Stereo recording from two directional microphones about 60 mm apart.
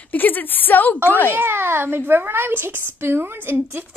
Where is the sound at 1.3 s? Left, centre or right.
Right.